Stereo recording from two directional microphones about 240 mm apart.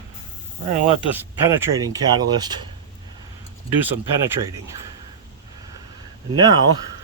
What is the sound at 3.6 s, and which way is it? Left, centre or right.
Speech, centre.